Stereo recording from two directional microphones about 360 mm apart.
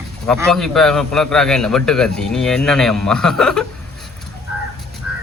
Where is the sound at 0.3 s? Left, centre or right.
Centre.